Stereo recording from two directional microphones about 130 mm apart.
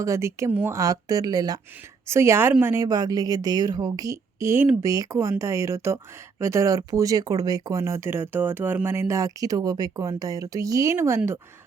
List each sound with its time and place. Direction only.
0.0 s a woman's voice: 25° right (ahead or behind)
0.8 s speech: 30° right (ahead or behind)
2.8 s speech: 30° right (ahead or behind)